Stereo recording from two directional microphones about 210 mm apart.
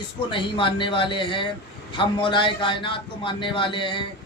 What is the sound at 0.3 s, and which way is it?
A man's voice, 25° left (ahead or behind).